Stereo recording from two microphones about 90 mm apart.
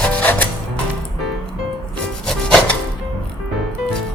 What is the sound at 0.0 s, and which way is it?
Music, 15° left (ahead or behind).